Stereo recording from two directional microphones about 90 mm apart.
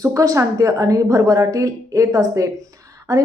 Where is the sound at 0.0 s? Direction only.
40° right (ahead or behind).